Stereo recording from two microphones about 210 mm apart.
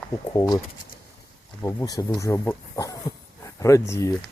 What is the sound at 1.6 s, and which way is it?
Speech, 15° left (ahead or behind).